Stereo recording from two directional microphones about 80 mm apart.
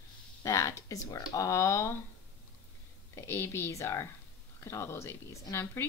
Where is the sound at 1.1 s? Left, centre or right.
Left.